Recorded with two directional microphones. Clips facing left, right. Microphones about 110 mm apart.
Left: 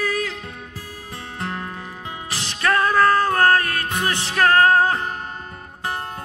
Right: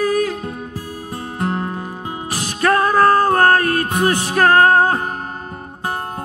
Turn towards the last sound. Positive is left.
turn(degrees=-35)  # may be behind; listen again after turning